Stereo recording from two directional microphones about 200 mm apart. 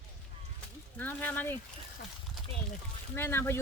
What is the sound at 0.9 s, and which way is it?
Speech, 10° left (ahead or behind).